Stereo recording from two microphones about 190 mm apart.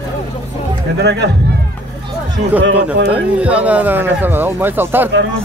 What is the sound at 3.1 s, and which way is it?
Speech, 5° right (ahead or behind).